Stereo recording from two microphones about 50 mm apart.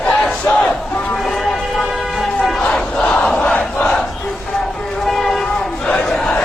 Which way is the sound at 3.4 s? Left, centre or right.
Left.